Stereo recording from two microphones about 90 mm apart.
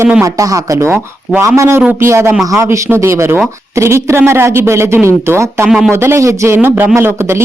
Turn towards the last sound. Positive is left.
turn(degrees=-30)  # may be behind; listen again after turning